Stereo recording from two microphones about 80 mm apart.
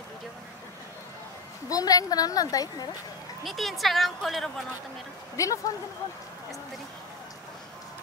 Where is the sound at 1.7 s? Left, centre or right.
Left.